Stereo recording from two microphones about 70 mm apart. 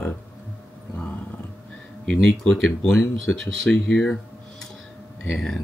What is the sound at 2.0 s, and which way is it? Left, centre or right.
Speech, centre.